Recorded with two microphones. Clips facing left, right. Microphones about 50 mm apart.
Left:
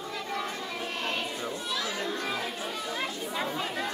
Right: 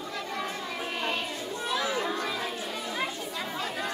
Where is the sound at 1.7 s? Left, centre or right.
Right.